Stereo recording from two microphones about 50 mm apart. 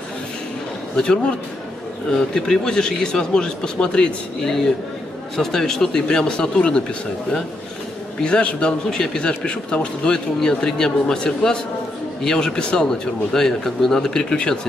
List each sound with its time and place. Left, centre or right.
0.9 s speech: centre
2.3 s speech: centre
8.2 s a man's voice: left
8.9 s speech: centre